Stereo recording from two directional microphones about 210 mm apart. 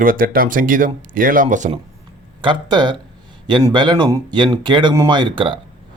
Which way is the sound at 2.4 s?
20° right (ahead or behind).